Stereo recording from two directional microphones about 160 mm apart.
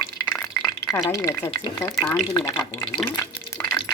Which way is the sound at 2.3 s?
20° left (ahead or behind).